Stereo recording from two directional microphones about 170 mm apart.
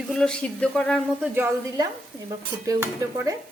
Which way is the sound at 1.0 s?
10° right (ahead or behind).